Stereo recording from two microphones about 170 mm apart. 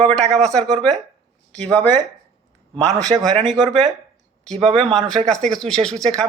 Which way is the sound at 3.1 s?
35° right (ahead or behind).